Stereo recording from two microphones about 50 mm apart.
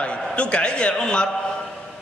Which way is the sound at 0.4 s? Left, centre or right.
Left.